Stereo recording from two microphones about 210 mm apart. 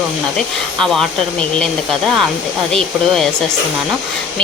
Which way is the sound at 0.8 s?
Centre (ahead or behind).